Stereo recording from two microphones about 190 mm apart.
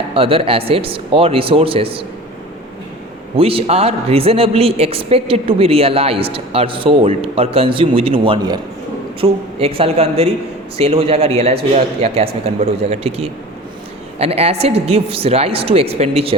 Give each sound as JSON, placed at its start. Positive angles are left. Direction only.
{"t": 0.1, "sound": "speech", "side_deg": -30}
{"t": 3.3, "sound": "a woman's voice", "side_deg": -30}